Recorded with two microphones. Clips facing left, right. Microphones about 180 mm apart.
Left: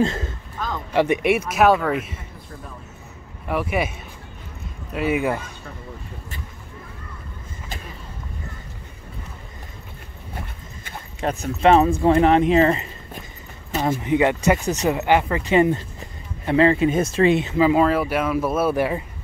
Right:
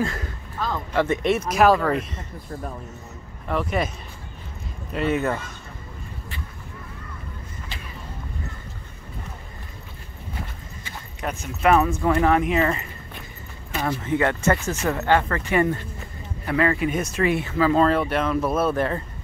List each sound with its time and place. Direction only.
0.0 s speech: 25° left (ahead or behind); by 2.2 s 5° left (ahead or behind)
3.4 s speech: 5° left (ahead or behind)
4.9 s speech: 10° left (ahead or behind)
11.1 s speech: 30° left (ahead or behind)
14.0 s speech: 15° left (ahead or behind)
17.8 s speech: 5° left (ahead or behind)